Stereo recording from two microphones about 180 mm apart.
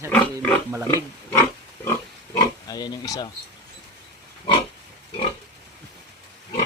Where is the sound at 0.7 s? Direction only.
15° right (ahead or behind).